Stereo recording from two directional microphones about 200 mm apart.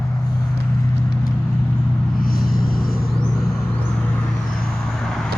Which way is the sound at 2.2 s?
45° left (ahead or behind).